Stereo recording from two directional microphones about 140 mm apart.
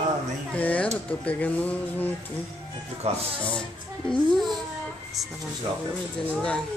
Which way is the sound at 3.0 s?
50° right (ahead or behind).